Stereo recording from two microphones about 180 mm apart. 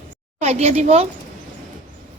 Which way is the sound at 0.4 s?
35° right (ahead or behind).